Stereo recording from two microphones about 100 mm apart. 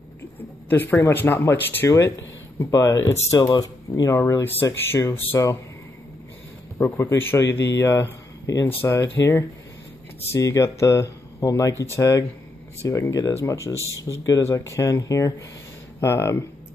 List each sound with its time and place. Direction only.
0.7 s speech: 20° left (ahead or behind)
6.8 s speech: 25° left (ahead or behind)